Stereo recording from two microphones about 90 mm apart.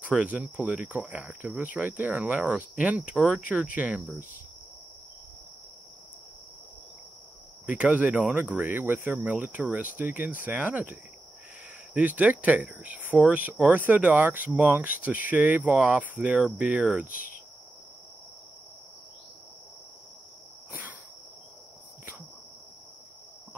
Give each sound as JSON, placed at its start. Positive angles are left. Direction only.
{"t": 0.0, "sound": "speech", "side_deg": -15}
{"t": 7.6, "sound": "speech", "side_deg": -15}